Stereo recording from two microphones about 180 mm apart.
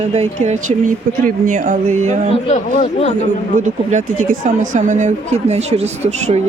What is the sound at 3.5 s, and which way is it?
Speech, 45° right (ahead or behind).